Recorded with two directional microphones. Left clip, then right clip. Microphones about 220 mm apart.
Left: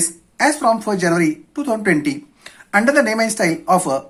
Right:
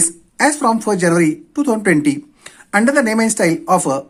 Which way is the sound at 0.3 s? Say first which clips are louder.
Right 1 dB; 35° right (ahead or behind).